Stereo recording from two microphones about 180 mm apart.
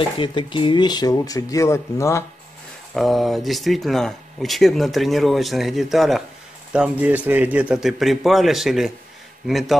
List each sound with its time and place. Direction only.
0.2 s speech: 25° left (ahead or behind)
2.9 s speech: centre (ahead or behind)